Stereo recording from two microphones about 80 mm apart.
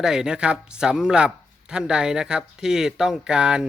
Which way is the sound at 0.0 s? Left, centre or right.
Centre.